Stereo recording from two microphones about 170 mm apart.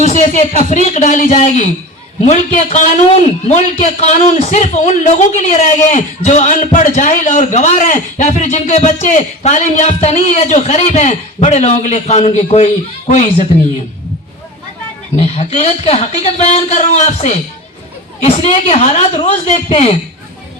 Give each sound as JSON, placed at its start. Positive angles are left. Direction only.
{"t": 0.0, "sound": "a man's voice", "side_deg": 45}
{"t": 15.1, "sound": "a man's voice", "side_deg": 40}